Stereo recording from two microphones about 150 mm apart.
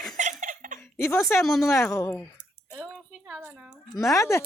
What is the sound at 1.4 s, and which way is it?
Speech, centre (ahead or behind).